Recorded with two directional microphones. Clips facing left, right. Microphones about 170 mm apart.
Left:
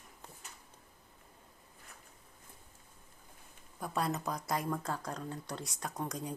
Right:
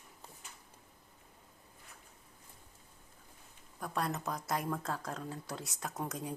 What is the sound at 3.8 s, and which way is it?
Speech, centre (ahead or behind).